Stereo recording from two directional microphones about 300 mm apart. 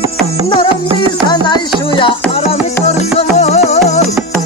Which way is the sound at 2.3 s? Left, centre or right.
Left.